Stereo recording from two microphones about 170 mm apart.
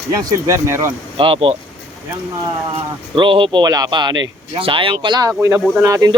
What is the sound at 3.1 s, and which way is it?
A man's voice, 30° right (ahead or behind).